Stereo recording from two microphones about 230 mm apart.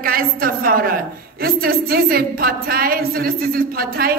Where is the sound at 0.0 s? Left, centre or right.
Right.